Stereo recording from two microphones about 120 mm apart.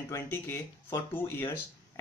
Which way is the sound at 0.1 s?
20° left (ahead or behind).